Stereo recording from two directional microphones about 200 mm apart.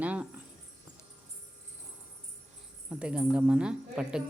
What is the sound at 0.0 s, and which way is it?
Keys jangling, 5° right (ahead or behind).